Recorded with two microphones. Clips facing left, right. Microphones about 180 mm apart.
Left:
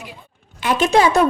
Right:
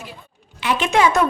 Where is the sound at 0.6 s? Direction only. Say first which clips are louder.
Left 2 dB; 40° left (ahead or behind).